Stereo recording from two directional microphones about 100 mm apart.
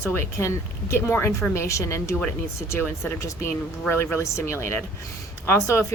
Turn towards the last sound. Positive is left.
turn(degrees=25)  # may be behind; listen again after turning